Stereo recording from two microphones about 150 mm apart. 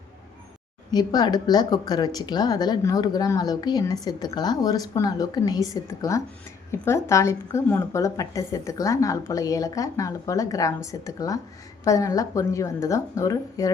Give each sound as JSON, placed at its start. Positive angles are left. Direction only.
{"t": 0.9, "sound": "speech", "side_deg": 25}